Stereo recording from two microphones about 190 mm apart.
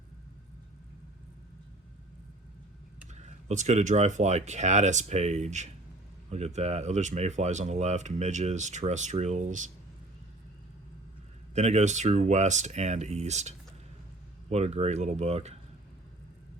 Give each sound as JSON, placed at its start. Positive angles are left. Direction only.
{"t": 3.1, "sound": "speech", "side_deg": -40}
{"t": 11.5, "sound": "speech", "side_deg": -35}
{"t": 14.5, "sound": "speech", "side_deg": -35}